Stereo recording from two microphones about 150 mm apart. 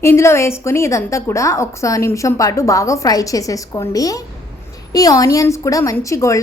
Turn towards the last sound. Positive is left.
turn(degrees=20)  # may be behind; listen again after turning